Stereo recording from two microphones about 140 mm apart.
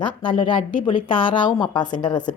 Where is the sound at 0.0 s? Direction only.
35° left (ahead or behind).